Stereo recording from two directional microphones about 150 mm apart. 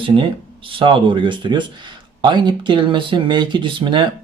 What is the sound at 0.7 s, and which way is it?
Speech, 35° right (ahead or behind).